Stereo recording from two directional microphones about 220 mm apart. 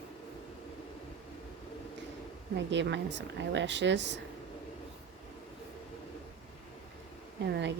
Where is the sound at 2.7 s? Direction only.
55° right (ahead or behind).